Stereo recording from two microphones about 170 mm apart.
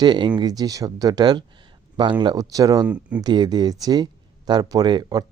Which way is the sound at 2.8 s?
5° right (ahead or behind).